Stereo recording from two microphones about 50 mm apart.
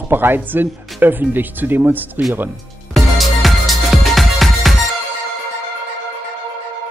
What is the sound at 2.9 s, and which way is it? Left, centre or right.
Music, centre.